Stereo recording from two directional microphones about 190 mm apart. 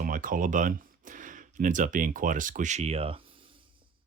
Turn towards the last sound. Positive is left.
turn(degrees=-30)  # may be behind; listen again after turning